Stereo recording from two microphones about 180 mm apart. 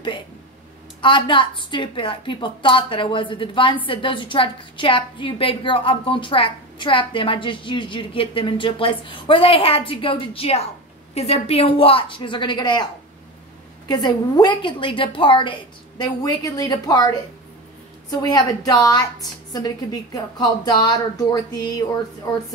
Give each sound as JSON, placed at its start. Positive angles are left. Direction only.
{"t": 1.0, "sound": "a woman's voice", "side_deg": 25}
{"t": 13.8, "sound": "a woman's voice", "side_deg": 25}
{"t": 18.2, "sound": "a woman's voice", "side_deg": 20}